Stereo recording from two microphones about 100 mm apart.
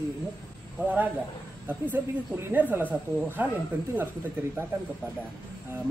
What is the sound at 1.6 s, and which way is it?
Speech, 20° right (ahead or behind).